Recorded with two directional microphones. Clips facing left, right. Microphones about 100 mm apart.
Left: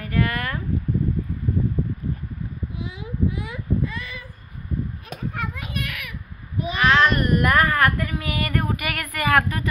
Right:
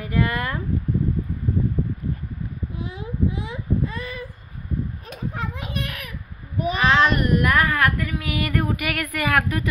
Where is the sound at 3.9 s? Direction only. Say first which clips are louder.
Right 3 dB; 40° right (ahead or behind).